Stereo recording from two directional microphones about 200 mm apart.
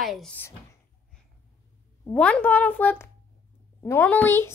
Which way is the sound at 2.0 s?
5° left (ahead or behind).